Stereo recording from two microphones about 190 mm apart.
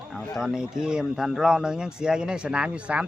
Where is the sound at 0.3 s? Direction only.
5° right (ahead or behind).